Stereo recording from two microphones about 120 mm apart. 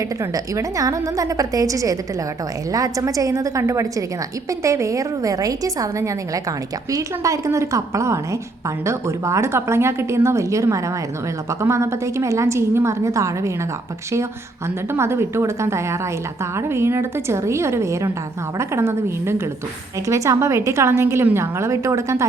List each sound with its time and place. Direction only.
0.2 s a woman's voice: 25° right (ahead or behind)
14.9 s a woman's voice: 20° right (ahead or behind)